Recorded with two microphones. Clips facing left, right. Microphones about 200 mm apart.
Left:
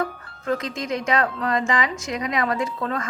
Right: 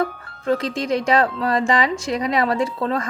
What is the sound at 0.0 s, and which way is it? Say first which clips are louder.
Speech: right 4 dB; 30° right (ahead or behind).